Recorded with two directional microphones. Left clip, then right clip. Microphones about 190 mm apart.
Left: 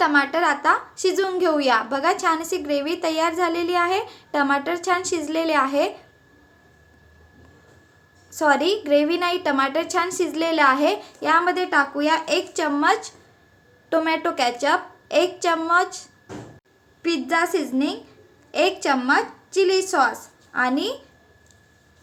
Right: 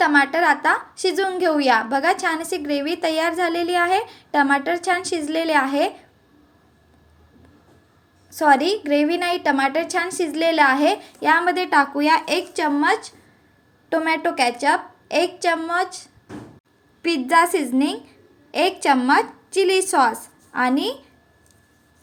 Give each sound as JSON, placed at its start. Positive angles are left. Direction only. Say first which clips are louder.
{"t": 0.0, "sound": "a woman's voice", "louder": "right 2 dB", "side_deg": -15}
{"t": 8.3, "sound": "a woman's voice", "louder": "right 3 dB", "side_deg": -15}